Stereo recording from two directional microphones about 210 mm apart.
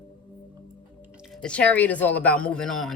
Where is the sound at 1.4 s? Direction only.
5° left (ahead or behind).